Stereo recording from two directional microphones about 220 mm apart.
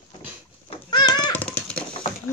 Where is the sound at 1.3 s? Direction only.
5° left (ahead or behind).